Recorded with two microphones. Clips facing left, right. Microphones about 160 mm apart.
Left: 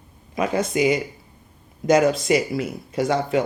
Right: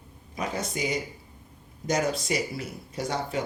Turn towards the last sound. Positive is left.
turn(degrees=90)